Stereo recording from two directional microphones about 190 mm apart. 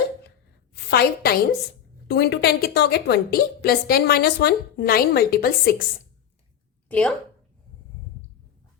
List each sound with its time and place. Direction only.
0.9 s a woman's voice: 55° left (ahead or behind)
6.8 s speech: 5° left (ahead or behind)